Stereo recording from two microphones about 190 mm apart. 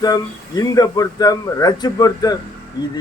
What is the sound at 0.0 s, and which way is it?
Speech, 20° left (ahead or behind).